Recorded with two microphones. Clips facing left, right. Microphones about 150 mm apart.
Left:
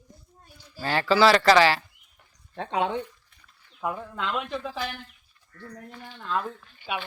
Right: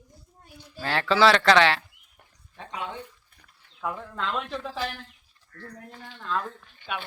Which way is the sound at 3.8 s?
10° left (ahead or behind).